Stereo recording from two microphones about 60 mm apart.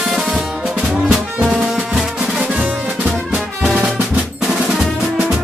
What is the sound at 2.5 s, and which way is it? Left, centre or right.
Music, right.